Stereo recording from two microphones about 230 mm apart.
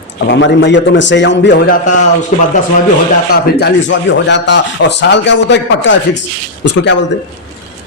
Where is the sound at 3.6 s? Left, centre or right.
Left.